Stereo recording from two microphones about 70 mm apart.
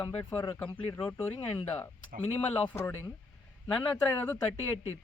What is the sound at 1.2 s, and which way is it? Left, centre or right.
Speech, left.